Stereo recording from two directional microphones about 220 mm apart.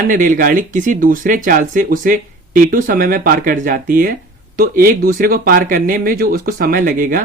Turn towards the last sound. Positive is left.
turn(degrees=-40)  # may be behind; listen again after turning